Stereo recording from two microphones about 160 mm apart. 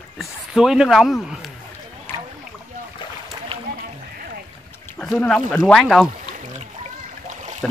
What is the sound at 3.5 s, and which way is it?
Run, 35° right (ahead or behind).